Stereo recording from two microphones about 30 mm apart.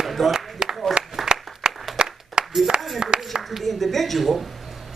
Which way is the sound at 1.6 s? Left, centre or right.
Right.